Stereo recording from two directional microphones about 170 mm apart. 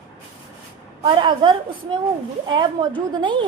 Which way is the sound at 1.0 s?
30° right (ahead or behind).